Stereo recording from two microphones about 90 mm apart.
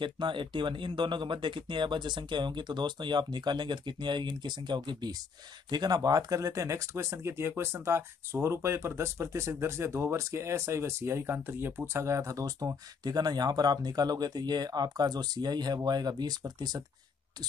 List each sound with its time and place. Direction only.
0.0 s speech: 65° right (ahead or behind); by 16.8 s 45° right (ahead or behind)